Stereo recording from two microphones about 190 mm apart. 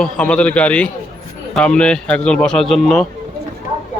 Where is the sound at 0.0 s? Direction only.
5° left (ahead or behind).